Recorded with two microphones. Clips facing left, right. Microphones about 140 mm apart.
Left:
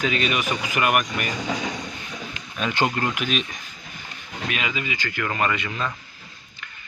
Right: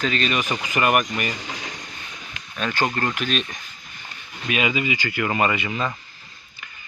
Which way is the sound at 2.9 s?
10° left (ahead or behind).